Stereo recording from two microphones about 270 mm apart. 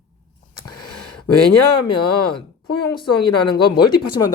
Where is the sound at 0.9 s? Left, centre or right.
Left.